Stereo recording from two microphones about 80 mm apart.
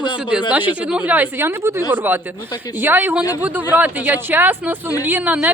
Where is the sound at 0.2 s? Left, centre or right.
Centre.